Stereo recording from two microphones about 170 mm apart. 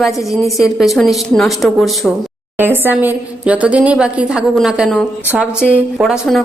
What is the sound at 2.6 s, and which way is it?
A woman's voice, 10° right (ahead or behind).